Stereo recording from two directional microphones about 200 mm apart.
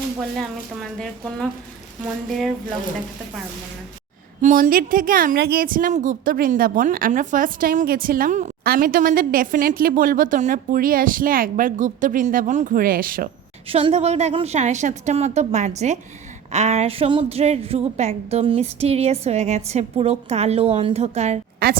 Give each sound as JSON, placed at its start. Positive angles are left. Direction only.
{"t": 0.3, "sound": "speech", "side_deg": 0}
{"t": 4.4, "sound": "a woman's voice", "side_deg": -40}
{"t": 13.7, "sound": "a woman's voice", "side_deg": -30}